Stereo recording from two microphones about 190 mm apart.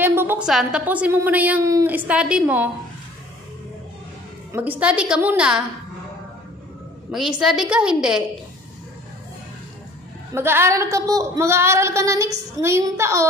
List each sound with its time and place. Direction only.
0.0 s a woman's voice: 10° right (ahead or behind)
4.5 s a woman's voice: 10° right (ahead or behind)
7.1 s a woman's voice: 5° right (ahead or behind)
10.3 s a woman's voice: 10° right (ahead or behind)